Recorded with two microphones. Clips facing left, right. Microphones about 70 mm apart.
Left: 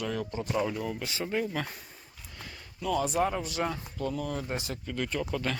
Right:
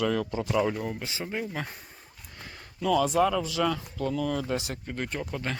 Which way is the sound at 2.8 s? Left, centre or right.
Right.